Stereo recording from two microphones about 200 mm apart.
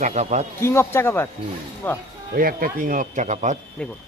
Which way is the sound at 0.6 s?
15° left (ahead or behind).